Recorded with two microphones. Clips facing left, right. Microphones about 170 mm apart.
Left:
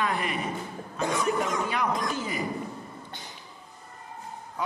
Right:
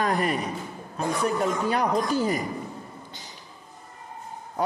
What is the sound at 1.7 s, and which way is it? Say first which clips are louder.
Speech: right 5 dB; 35° right (ahead or behind).